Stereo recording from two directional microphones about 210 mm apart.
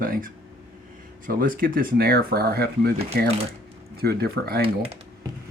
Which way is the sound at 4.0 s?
45° right (ahead or behind).